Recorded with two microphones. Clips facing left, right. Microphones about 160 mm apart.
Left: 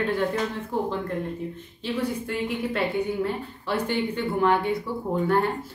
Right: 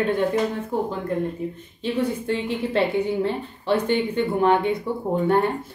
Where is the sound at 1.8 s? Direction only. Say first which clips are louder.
Right 4 dB; 25° right (ahead or behind).